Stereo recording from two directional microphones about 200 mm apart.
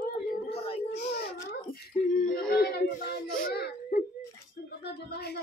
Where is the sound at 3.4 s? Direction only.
45° left (ahead or behind).